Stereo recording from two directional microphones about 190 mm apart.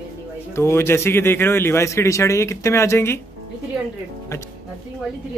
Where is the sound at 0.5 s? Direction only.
15° left (ahead or behind).